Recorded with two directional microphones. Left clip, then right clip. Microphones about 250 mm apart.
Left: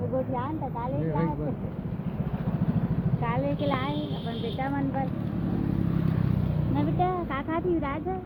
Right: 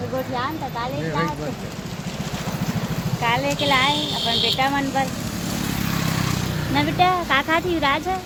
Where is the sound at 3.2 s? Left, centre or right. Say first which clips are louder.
Right 9 dB; right.